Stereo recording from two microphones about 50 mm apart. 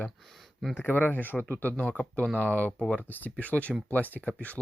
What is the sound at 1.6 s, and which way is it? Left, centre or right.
Speech, left.